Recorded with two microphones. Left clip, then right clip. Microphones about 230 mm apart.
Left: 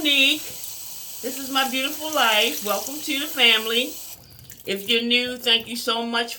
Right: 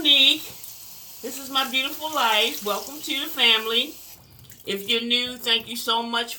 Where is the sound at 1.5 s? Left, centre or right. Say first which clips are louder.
Even; right.